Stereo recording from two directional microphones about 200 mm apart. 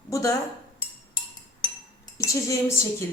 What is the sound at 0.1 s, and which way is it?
Speech, 15° left (ahead or behind).